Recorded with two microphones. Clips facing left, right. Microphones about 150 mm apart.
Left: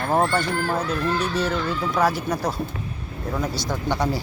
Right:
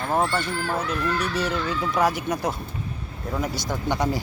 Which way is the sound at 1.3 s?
15° right (ahead or behind).